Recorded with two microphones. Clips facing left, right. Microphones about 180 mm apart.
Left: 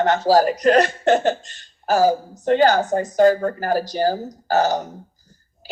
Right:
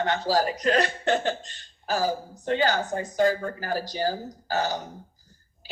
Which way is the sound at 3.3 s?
55° left (ahead or behind).